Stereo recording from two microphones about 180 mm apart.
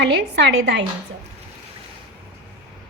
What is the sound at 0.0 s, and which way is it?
Speech, 70° right (ahead or behind).